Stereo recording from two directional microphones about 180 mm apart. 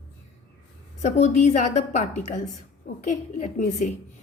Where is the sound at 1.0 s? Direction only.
40° left (ahead or behind).